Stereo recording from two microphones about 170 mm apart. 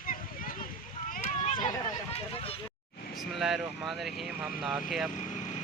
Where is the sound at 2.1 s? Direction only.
35° left (ahead or behind).